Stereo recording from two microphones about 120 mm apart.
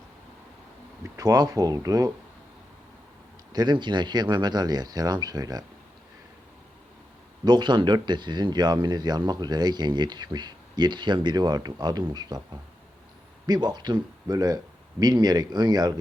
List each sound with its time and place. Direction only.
1.1 s speech: 30° right (ahead or behind)
3.5 s speech: 35° right (ahead or behind)
7.4 s speech: 40° right (ahead or behind)
13.5 s speech: 35° right (ahead or behind)